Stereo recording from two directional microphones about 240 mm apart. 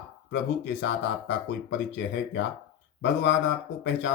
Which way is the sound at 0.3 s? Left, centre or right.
Left.